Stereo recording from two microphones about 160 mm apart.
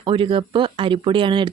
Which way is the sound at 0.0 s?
30° right (ahead or behind).